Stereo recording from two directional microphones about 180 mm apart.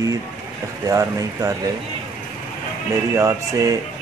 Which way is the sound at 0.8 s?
15° right (ahead or behind).